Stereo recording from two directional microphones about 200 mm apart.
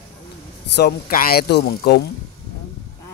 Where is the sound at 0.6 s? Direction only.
55° left (ahead or behind).